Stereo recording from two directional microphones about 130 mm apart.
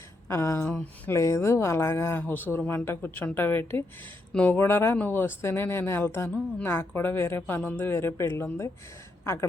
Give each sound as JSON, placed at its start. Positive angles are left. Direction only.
{"t": 0.3, "sound": "a woman's voice", "side_deg": 20}